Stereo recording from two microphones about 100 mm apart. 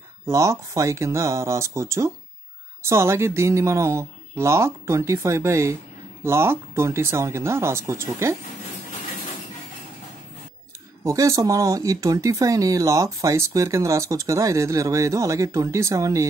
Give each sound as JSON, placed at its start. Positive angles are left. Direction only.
{"t": 0.3, "sound": "speech", "side_deg": -30}
{"t": 11.1, "sound": "speech", "side_deg": -30}